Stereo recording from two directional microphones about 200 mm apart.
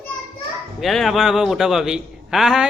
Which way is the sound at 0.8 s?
Centre (ahead or behind).